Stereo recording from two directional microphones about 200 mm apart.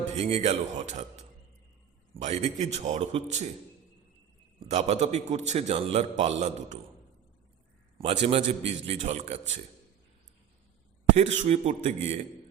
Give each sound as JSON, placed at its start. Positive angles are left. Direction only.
{"t": 0.2, "sound": "a man's voice", "side_deg": -30}
{"t": 2.2, "sound": "a man's voice", "side_deg": -35}
{"t": 4.6, "sound": "a man's voice", "side_deg": -35}
{"t": 7.9, "sound": "a man's voice", "side_deg": -30}
{"t": 11.1, "sound": "a man's voice", "side_deg": -35}